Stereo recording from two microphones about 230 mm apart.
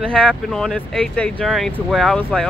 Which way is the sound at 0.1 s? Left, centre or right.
Centre.